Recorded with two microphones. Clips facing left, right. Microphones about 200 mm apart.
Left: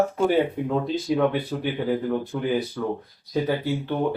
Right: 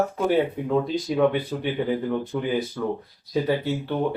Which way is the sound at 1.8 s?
Centre (ahead or behind).